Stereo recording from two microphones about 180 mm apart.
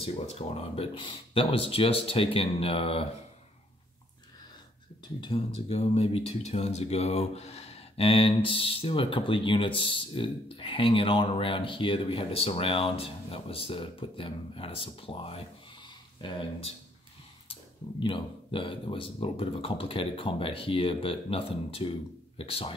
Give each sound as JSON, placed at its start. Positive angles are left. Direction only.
{"t": 0.0, "sound": "speech", "side_deg": 35}
{"t": 5.2, "sound": "speech", "side_deg": 35}